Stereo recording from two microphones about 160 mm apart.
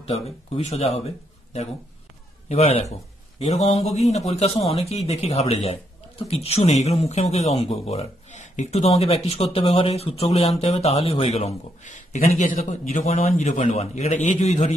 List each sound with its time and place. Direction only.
0.7 s a man's voice: 40° left (ahead or behind)